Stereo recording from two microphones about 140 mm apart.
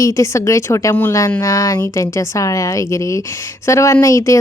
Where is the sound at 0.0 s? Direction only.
20° left (ahead or behind).